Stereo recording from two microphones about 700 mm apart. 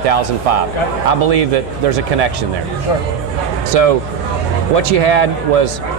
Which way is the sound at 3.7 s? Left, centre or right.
Right.